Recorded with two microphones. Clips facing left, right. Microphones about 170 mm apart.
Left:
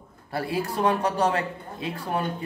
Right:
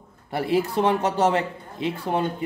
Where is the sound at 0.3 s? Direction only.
20° right (ahead or behind).